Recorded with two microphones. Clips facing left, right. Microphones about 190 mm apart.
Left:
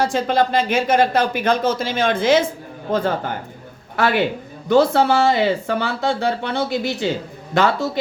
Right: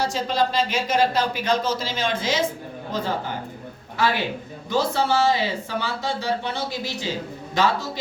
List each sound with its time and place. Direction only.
0.0 s speech: 55° left (ahead or behind)